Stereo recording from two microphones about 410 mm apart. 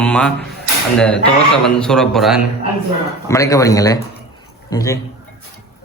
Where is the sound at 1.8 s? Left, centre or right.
Centre.